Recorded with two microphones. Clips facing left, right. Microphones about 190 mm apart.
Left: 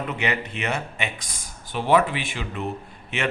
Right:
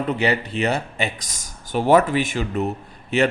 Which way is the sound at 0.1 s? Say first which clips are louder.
Right 6 dB; 35° right (ahead or behind).